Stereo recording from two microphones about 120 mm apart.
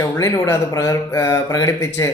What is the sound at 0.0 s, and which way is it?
A man's voice, 30° left (ahead or behind).